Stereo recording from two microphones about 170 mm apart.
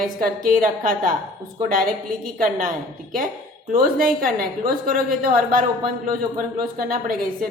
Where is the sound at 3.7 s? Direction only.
55° right (ahead or behind).